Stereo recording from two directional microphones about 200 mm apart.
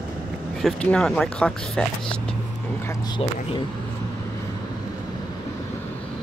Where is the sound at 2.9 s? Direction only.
20° left (ahead or behind).